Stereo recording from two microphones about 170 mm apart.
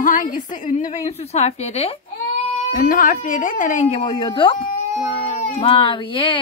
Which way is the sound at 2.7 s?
55° left (ahead or behind).